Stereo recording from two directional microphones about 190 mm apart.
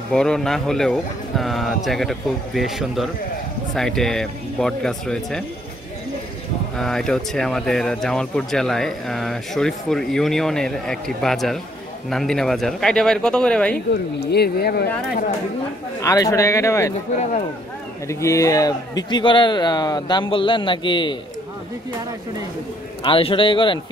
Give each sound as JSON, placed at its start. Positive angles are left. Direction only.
{"t": 0.1, "sound": "speech", "side_deg": 5}
{"t": 6.8, "sound": "speech", "side_deg": 0}
{"t": 14.2, "sound": "speech", "side_deg": 60}
{"t": 16.0, "sound": "a man's voice", "side_deg": 15}
{"t": 18.0, "sound": "a man's voice", "side_deg": 15}
{"t": 23.0, "sound": "a man's voice", "side_deg": 30}